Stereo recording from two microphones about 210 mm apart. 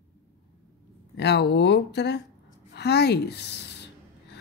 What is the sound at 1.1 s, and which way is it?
A woman's voice, 55° left (ahead or behind).